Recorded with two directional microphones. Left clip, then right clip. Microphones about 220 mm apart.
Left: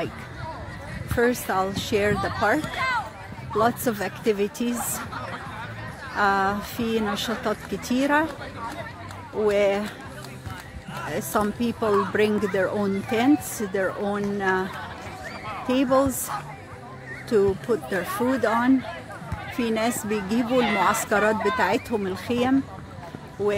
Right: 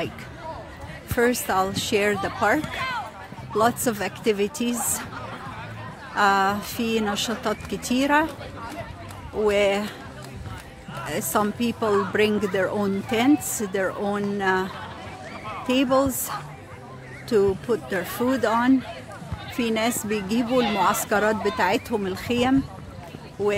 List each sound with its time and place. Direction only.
1.1 s speech: 5° right (ahead or behind)
3.5 s speech: 5° right (ahead or behind)
6.1 s speech: 5° right (ahead or behind)
9.5 s speech: centre (ahead or behind)
11.1 s speech: centre (ahead or behind)
20.4 s speech: 15° left (ahead or behind)
21.1 s speech: centre (ahead or behind)